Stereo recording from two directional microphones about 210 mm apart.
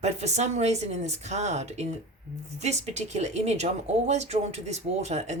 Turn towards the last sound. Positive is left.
turn(degrees=-35)  # may be behind; listen again after turning